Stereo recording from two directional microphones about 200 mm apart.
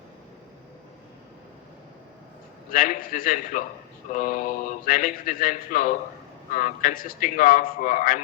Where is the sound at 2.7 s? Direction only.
45° left (ahead or behind).